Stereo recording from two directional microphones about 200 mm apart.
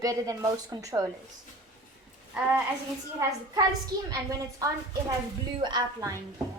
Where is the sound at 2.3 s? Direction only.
5° right (ahead or behind).